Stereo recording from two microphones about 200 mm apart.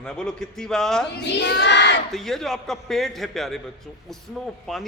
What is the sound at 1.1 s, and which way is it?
Speech, 55° left (ahead or behind).